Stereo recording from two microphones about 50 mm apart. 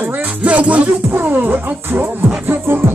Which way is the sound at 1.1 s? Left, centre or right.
Right.